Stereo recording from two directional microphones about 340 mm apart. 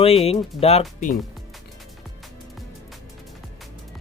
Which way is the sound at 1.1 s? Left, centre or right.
Centre.